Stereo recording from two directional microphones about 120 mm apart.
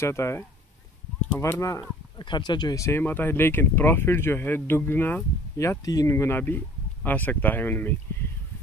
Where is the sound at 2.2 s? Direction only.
40° left (ahead or behind).